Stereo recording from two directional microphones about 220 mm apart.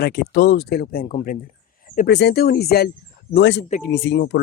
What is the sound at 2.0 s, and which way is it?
A woman's voice, 50° left (ahead or behind).